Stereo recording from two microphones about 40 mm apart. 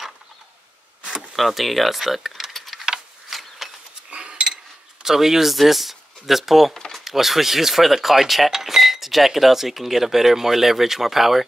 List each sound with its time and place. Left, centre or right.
1.3 s mechanisms: centre
4.1 s a sound: right
5.0 s speech: centre